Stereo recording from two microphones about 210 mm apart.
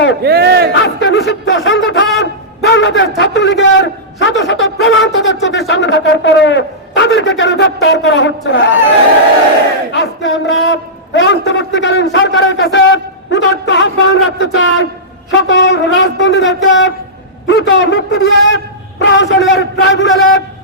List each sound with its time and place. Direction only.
0.2 s speech: 50° right (ahead or behind)
0.8 s speech: 60° left (ahead or behind)
2.1 s a sound: 55° left (ahead or behind)
3.2 s a man's voice: 60° left (ahead or behind)
9.9 s a man's voice: 60° left (ahead or behind)